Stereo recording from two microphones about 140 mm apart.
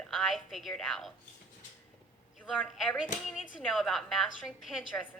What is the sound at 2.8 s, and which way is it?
A woman's voice, centre (ahead or behind).